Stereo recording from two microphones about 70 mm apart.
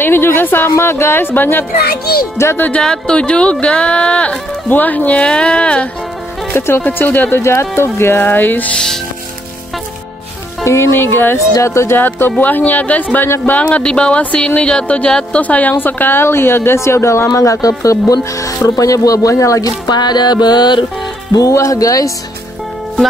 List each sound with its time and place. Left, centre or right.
0.0 s speech: left
2.3 s speech: left
2.8 s speech: centre
6.5 s speech: left
8.7 s speech: centre
10.6 s speech: left
11.3 s a woman's voice: left
12.0 s a woman's voice: left
19.9 s music: left
21.3 s speech: left